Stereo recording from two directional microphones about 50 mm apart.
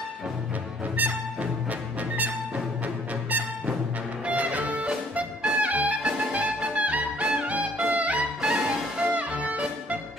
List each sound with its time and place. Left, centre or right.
0.9 s music: right
4.3 s music: right
8.4 s music: centre